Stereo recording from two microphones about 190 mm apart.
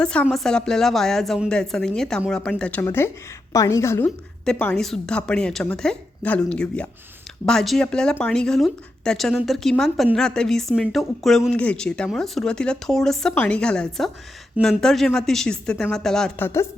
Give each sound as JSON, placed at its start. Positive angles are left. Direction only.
{"t": 0.0, "sound": "speech", "side_deg": 5}